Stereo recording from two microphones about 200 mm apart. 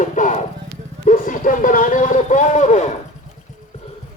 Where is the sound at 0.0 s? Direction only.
40° left (ahead or behind).